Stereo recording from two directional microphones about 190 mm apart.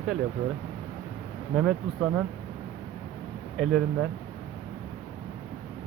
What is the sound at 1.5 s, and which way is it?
Speech, centre (ahead or behind).